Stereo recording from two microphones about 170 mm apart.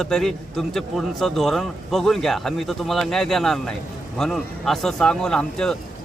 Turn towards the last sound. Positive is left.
turn(degrees=5)  # may be behind; listen again after turning